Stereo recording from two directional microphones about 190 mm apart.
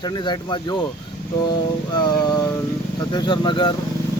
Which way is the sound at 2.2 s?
20° left (ahead or behind).